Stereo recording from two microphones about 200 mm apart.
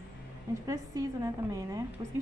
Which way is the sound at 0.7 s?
15° right (ahead or behind).